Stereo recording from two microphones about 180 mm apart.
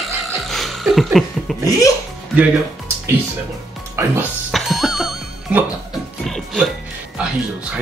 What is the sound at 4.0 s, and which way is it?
Speech, 15° right (ahead or behind).